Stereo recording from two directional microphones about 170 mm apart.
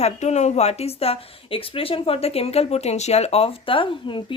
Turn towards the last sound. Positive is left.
turn(degrees=30)  # may be behind; listen again after turning